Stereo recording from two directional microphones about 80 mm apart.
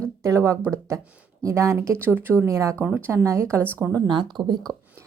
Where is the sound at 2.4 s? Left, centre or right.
Right.